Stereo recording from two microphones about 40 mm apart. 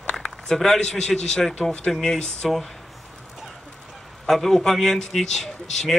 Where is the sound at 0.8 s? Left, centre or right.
Centre.